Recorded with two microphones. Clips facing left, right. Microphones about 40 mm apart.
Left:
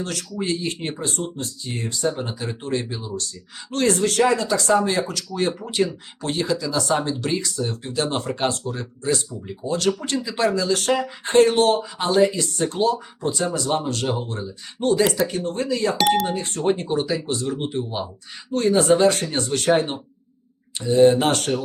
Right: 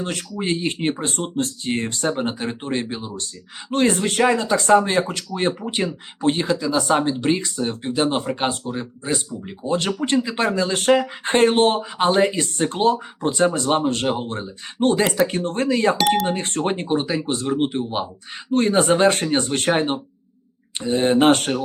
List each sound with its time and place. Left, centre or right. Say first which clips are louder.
0.0 s speech: right 1 dB; right
8.1 s speech: right 1 dB; centre; by 16.0 s right
16.0 s speech: even; centre
16.4 s speech: left 1 dB; right